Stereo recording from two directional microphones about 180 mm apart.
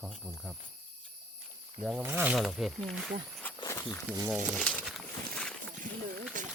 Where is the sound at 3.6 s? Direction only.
15° left (ahead or behind).